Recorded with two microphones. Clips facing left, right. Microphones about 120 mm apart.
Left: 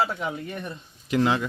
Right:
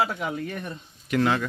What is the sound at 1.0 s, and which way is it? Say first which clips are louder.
Speech: even; 25° left (ahead or behind).